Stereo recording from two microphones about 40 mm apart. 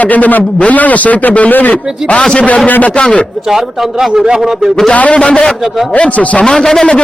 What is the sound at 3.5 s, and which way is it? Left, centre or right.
Speech, centre.